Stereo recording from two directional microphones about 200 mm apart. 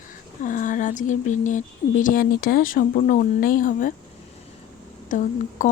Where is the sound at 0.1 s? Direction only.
40° left (ahead or behind).